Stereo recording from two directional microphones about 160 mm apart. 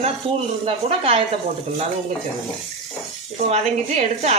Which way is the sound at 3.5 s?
45° right (ahead or behind).